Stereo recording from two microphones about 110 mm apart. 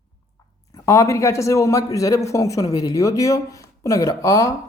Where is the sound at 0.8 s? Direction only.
30° left (ahead or behind).